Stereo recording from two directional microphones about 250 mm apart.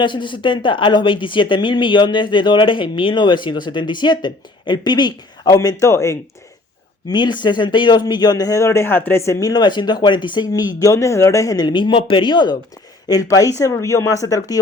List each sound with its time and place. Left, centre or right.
0.0 s speech: centre